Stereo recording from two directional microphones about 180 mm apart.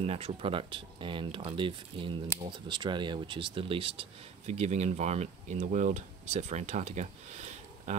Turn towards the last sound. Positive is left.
turn(degrees=-40)  # may be behind; listen again after turning